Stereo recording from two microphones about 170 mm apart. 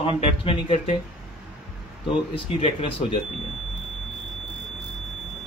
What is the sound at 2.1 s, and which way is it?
A man's voice, 35° left (ahead or behind).